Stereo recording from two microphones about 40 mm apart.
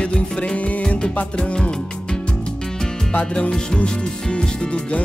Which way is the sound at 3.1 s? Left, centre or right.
Left.